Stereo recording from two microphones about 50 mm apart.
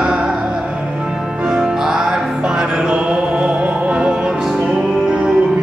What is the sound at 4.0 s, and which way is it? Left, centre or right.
Music, centre.